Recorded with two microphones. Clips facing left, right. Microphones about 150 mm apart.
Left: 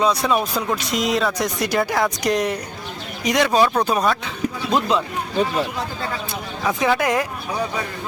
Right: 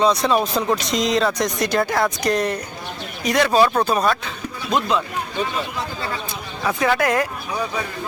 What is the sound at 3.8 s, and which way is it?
Speech, 10° left (ahead or behind).